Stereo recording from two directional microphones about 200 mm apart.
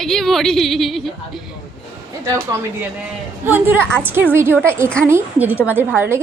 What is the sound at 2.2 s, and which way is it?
Speech, 15° right (ahead or behind).